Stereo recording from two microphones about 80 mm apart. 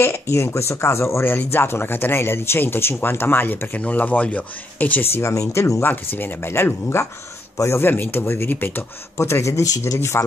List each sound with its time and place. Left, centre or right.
0.0 s speech: left
5.2 s speech: left
7.8 s speech: left